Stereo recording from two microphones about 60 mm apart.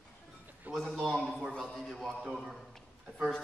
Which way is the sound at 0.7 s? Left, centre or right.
Right.